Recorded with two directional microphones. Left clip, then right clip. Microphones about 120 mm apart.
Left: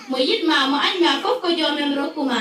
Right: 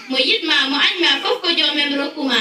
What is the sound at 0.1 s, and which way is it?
A woman's voice, 40° left (ahead or behind).